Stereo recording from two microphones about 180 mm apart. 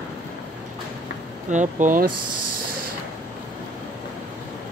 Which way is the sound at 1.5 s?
45° right (ahead or behind).